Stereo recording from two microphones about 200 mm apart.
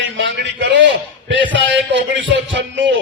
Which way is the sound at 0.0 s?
65° right (ahead or behind).